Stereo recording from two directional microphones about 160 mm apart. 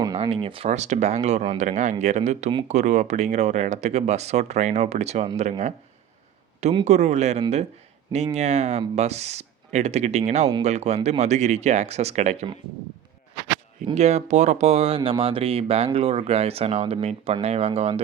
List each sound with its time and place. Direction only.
0.2 s speech: 35° right (ahead or behind)
6.8 s speech: 45° right (ahead or behind)
13.9 s speech: 45° right (ahead or behind)